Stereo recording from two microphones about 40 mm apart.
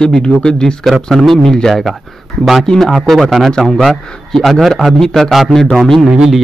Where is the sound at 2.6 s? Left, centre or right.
Centre.